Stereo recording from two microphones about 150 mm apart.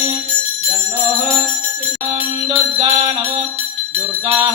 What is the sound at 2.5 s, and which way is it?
Jingle bell, 40° right (ahead or behind).